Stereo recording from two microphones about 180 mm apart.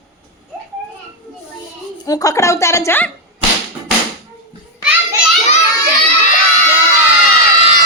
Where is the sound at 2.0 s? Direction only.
20° left (ahead or behind).